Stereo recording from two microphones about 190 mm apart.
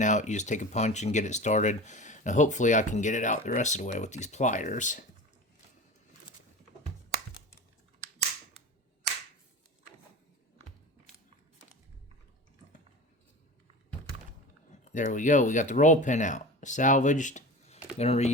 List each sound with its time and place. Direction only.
0.0 s speech: 40° left (ahead or behind)
14.9 s speech: 40° left (ahead or behind)